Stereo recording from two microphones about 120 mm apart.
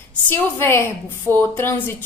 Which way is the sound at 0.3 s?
20° left (ahead or behind).